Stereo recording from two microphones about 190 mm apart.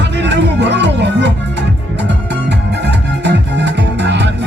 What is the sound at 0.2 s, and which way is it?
Music, 65° right (ahead or behind).